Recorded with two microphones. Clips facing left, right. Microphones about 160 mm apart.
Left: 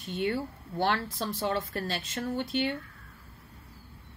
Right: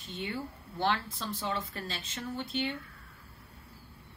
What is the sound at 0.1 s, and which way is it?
A woman's voice, 60° left (ahead or behind).